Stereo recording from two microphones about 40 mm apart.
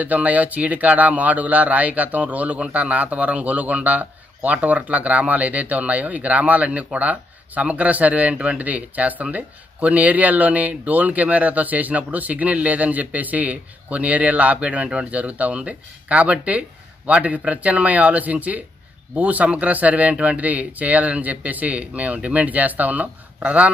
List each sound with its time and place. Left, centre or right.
0.0 s speech: right